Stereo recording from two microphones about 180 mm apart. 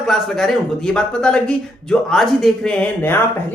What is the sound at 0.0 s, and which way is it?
Speech, centre (ahead or behind).